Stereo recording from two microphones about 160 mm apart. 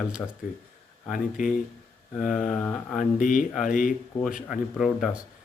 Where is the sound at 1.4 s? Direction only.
55° left (ahead or behind).